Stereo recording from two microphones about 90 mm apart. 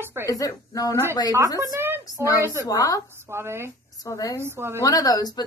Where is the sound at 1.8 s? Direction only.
25° right (ahead or behind).